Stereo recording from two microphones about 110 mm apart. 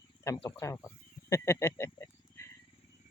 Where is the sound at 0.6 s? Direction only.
30° left (ahead or behind).